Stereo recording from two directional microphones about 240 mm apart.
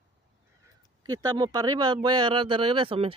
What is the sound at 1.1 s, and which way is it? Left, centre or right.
Speech, centre.